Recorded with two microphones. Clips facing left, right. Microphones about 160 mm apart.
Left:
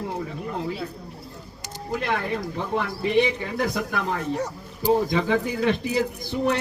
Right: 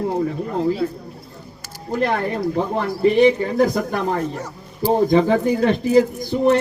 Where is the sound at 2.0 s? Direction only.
45° right (ahead or behind).